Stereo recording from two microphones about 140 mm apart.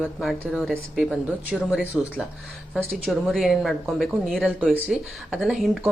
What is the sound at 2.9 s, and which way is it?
Speech, centre (ahead or behind).